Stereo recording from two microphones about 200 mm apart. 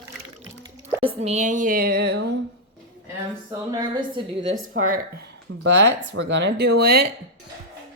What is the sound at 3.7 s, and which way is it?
Speech, 20° right (ahead or behind).